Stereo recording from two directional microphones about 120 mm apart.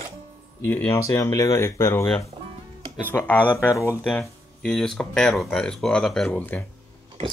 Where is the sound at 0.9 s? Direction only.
25° left (ahead or behind).